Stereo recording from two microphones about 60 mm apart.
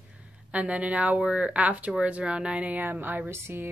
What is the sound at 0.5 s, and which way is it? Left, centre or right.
Speech, right.